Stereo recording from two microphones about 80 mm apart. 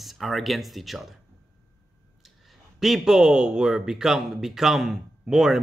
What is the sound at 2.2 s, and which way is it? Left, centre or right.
Speech, centre.